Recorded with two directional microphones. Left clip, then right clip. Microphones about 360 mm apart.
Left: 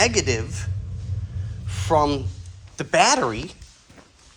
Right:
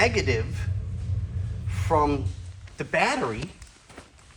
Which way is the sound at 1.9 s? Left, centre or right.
Centre.